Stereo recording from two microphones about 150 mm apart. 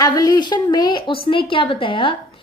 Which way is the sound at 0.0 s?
25° left (ahead or behind).